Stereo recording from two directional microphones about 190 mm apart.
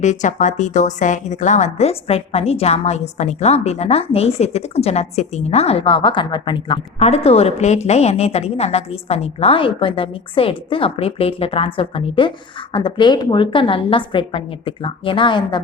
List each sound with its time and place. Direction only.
0.0 s a woman's voice: 40° left (ahead or behind); by 15.6 s 25° left (ahead or behind)